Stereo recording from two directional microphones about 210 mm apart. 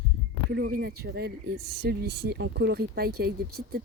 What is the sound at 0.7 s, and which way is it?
Speech, 50° right (ahead or behind).